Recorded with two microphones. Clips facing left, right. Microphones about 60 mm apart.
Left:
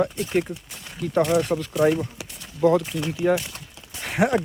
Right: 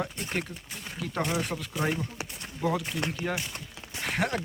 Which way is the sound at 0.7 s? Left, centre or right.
Centre.